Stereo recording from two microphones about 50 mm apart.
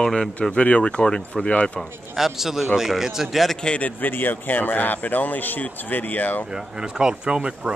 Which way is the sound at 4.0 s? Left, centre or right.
Left.